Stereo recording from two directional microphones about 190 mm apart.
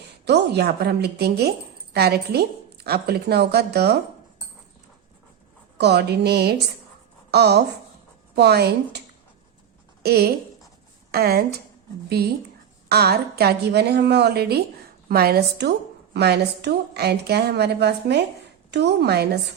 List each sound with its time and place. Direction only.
0.3 s a woman's voice: 60° right (ahead or behind)
5.7 s a woman's voice: 60° right (ahead or behind)
10.0 s a woman's voice: 55° right (ahead or behind)